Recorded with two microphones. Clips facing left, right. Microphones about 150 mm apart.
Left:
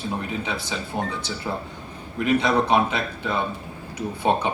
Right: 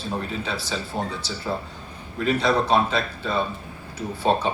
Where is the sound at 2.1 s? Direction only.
15° left (ahead or behind).